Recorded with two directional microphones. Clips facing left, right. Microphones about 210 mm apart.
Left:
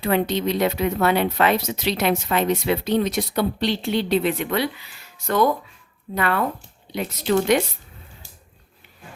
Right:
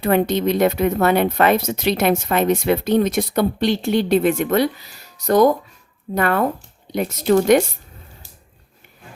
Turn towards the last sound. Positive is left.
turn(degrees=-45)  # may be behind; listen again after turning